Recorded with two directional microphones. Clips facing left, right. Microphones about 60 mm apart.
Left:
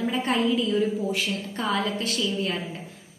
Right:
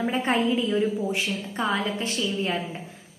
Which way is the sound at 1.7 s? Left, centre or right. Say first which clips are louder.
Even; right.